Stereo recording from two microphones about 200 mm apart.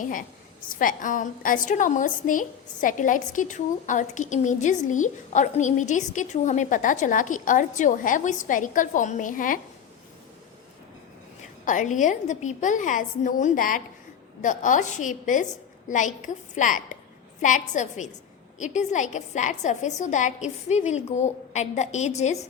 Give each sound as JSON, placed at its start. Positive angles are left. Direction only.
{"t": 0.0, "sound": "a woman's voice", "side_deg": 40}
{"t": 11.6, "sound": "a woman's voice", "side_deg": 40}